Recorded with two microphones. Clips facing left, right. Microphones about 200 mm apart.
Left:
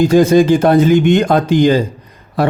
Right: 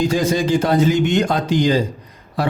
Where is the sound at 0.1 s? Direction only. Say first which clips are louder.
Left 8 dB; 55° left (ahead or behind).